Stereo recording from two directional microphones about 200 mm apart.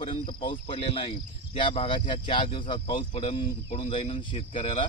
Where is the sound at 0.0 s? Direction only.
25° left (ahead or behind).